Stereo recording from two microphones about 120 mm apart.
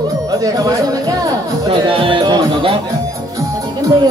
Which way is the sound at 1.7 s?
45° right (ahead or behind).